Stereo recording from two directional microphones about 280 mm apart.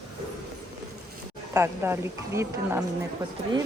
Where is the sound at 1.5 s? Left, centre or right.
Centre.